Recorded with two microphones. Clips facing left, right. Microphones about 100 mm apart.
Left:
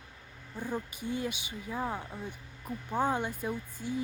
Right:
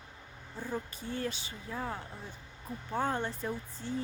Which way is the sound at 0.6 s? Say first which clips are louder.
Left 2 dB; 15° left (ahead or behind).